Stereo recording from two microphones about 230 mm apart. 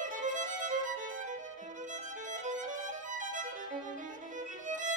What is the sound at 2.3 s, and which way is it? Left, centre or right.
Violin, right.